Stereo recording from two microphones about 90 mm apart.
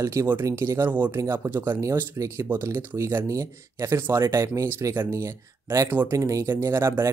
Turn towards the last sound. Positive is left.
turn(degrees=-30)  # may be behind; listen again after turning